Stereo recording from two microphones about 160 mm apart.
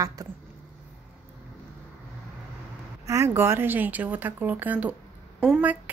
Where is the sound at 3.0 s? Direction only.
20° right (ahead or behind).